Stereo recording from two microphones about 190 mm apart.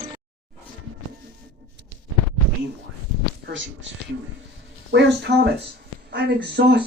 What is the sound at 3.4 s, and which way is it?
Speech, 75° right (ahead or behind).